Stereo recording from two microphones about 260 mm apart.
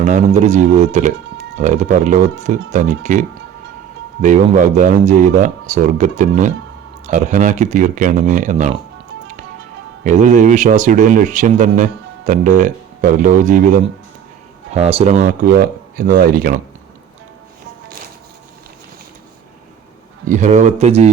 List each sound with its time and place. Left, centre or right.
0.0 s speech: right
10.0 s speech: right
20.2 s speech: right